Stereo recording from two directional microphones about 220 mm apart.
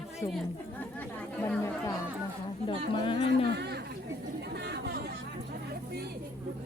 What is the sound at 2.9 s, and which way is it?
Speech, 20° left (ahead or behind).